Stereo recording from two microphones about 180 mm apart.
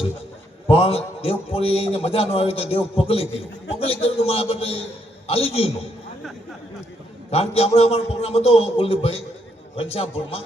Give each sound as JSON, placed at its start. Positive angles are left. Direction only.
{"t": 0.7, "sound": "a man's voice", "side_deg": 35}
{"t": 7.3, "sound": "a man's voice", "side_deg": 35}